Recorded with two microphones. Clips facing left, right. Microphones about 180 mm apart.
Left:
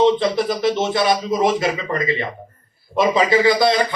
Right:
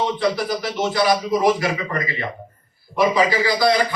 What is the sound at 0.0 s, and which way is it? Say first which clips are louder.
A man's voice: left 5 dB; 25° left (ahead or behind).